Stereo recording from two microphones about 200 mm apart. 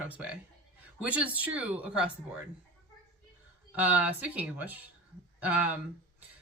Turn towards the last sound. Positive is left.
turn(degrees=-10)  # may be behind; listen again after turning